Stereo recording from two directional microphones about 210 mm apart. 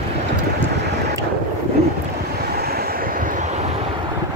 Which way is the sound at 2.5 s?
50° right (ahead or behind).